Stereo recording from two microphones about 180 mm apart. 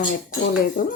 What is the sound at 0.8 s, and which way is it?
Speech, 50° left (ahead or behind).